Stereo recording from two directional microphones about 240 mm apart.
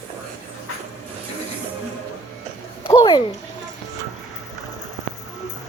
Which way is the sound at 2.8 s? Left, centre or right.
Centre.